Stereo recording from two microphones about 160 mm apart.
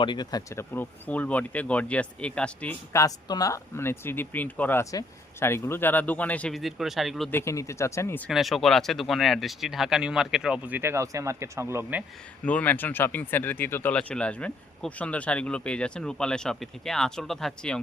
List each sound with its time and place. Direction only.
0.0 s speech: 30° left (ahead or behind)
0.7 s speech: 10° left (ahead or behind)
7.3 s speech: 15° left (ahead or behind)
8.3 s speech: centre (ahead or behind)
12.5 s speech: 10° left (ahead or behind)